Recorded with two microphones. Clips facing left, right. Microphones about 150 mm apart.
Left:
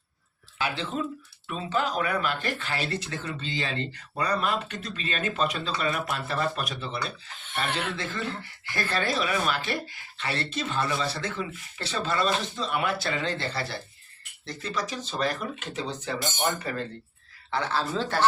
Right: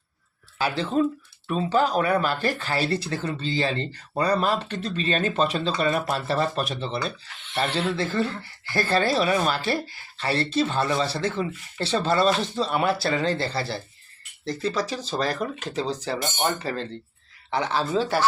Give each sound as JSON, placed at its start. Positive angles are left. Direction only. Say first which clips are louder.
{"t": 0.6, "sound": "speech", "louder": "right 7 dB", "side_deg": -40}
{"t": 7.3, "sound": "speech", "louder": "even", "side_deg": 40}
{"t": 7.8, "sound": "speech", "louder": "right 7 dB", "side_deg": -35}
{"t": 17.5, "sound": "speech", "louder": "right 4 dB", "side_deg": -15}